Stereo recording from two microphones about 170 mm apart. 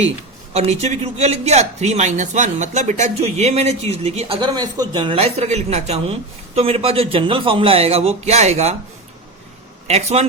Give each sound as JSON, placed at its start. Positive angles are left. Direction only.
{"t": 0.5, "sound": "speech", "side_deg": -40}
{"t": 4.4, "sound": "speech", "side_deg": -25}
{"t": 9.8, "sound": "speech", "side_deg": -40}